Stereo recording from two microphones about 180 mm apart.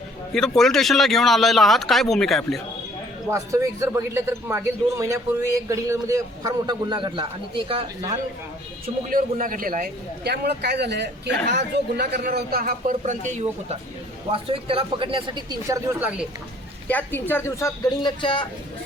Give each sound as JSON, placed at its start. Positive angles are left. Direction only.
{"t": 0.3, "sound": "speech", "side_deg": 5}
{"t": 3.2, "sound": "a man's voice", "side_deg": -15}
{"t": 9.0, "sound": "a man's voice", "side_deg": -50}
{"t": 13.0, "sound": "speech", "side_deg": -40}
{"t": 16.9, "sound": "speech", "side_deg": 10}